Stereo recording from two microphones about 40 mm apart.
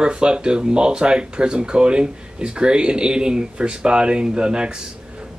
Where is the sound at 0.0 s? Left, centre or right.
Right.